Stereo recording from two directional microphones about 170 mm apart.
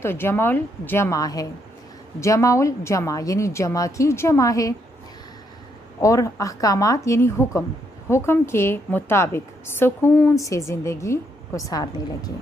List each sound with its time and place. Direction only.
0.0 s a woman's voice: 15° left (ahead or behind)
6.0 s a woman's voice: 20° left (ahead or behind)